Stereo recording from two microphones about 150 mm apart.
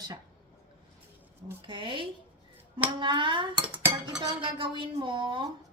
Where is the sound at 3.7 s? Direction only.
10° right (ahead or behind).